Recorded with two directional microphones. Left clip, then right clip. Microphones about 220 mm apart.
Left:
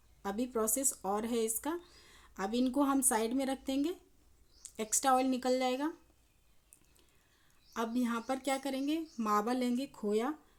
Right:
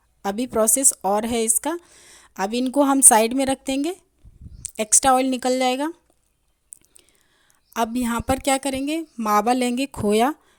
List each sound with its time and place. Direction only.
0.2 s speech: 40° right (ahead or behind)
7.7 s speech: 40° right (ahead or behind)